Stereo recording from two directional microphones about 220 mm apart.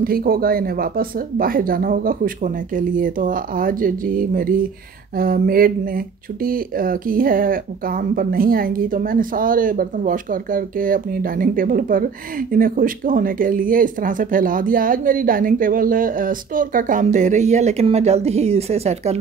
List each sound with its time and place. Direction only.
0.0 s speech: 40° right (ahead or behind)